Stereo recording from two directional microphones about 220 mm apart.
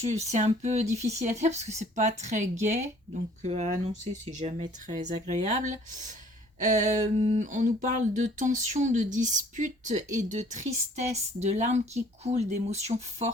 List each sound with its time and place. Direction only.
0.0 s speech: 30° right (ahead or behind)